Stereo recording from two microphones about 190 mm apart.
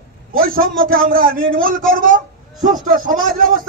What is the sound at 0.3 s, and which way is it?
A man's voice, 50° right (ahead or behind).